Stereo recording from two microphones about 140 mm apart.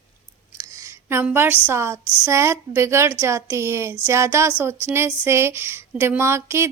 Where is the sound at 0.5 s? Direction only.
20° right (ahead or behind).